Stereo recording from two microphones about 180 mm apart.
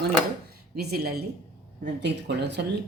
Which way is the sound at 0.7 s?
60° right (ahead or behind).